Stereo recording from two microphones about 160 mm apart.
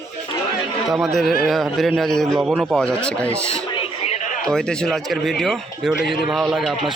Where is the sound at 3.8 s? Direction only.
45° left (ahead or behind).